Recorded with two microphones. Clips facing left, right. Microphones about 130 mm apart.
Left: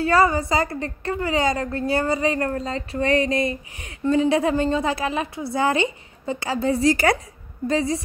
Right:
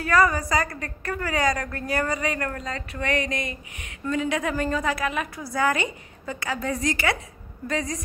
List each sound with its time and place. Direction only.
0.0 s a woman's voice: 30° left (ahead or behind)